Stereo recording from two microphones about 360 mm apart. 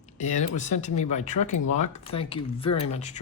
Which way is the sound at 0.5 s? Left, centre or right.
Centre.